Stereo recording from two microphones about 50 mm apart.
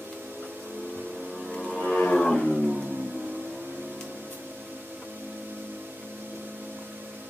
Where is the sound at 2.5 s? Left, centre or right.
Right.